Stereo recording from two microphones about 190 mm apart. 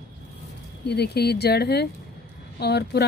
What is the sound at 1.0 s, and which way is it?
Speech, 55° left (ahead or behind).